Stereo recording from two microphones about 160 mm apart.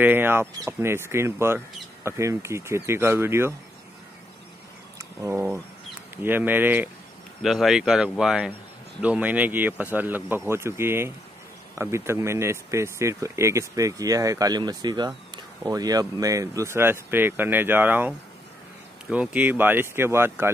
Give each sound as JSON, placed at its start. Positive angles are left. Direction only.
{"t": 0.0, "sound": "speech", "side_deg": -15}
{"t": 4.9, "sound": "a sound", "side_deg": -15}
{"t": 6.2, "sound": "speech", "side_deg": -10}
{"t": 7.4, "sound": "speech", "side_deg": 0}